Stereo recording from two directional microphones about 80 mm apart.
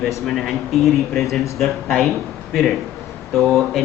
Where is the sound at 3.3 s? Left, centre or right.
Centre.